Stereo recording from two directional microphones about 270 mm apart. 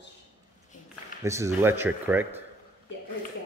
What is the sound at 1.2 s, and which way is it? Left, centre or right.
Speech, centre.